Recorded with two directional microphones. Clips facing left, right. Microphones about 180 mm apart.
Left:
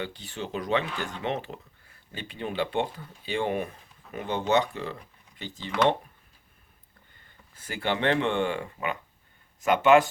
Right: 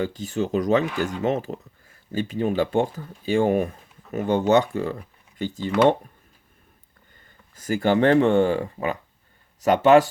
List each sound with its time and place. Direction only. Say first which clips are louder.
0.0 s speech: right 10 dB; 45° right (ahead or behind)
7.5 s speech: right 9 dB; 40° right (ahead or behind)